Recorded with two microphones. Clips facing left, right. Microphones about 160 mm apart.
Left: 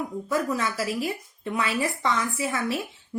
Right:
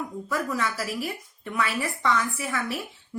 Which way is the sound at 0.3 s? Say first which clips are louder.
Left 2 dB; 25° left (ahead or behind).